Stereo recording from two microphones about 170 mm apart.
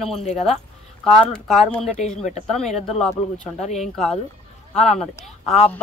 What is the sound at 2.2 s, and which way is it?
Speech, 40° left (ahead or behind).